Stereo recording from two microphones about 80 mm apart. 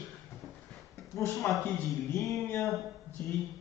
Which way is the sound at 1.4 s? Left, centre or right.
Left.